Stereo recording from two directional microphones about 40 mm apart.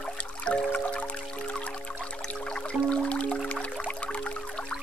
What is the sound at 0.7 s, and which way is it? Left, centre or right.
Music, left.